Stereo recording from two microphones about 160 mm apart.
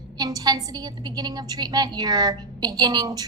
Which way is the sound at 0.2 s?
25° right (ahead or behind).